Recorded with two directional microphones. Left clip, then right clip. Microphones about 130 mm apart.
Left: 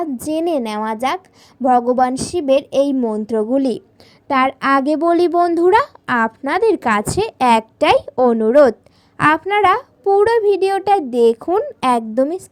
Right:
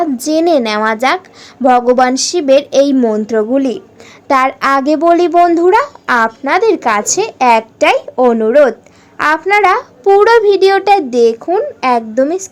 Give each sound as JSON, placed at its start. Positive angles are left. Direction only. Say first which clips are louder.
{"t": 0.0, "sound": "a woman's voice", "louder": "right 8 dB", "side_deg": 30}
{"t": 3.0, "sound": "a woman's voice", "louder": "right 7 dB", "side_deg": 0}
{"t": 3.2, "sound": "a child's voice", "louder": "right 4 dB", "side_deg": 35}
{"t": 4.3, "sound": "a child's voice", "louder": "right 4 dB", "side_deg": 25}
{"t": 9.1, "sound": "a woman's voice", "louder": "right 4 dB", "side_deg": 30}
{"t": 11.5, "sound": "a child's voice", "louder": "right 4 dB", "side_deg": 40}